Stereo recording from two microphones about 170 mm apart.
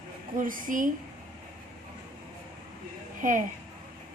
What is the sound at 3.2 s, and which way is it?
Speech, 50° right (ahead or behind).